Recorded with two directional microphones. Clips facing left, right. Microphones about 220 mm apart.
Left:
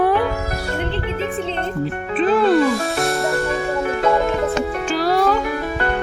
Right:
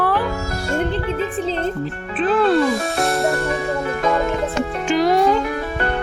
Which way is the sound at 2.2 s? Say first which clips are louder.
Left 1 dB; centre (ahead or behind).